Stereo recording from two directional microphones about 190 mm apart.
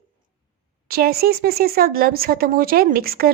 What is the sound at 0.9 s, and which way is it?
Speech, 55° right (ahead or behind).